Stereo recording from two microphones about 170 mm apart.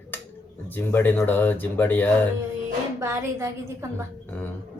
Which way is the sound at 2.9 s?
15° right (ahead or behind).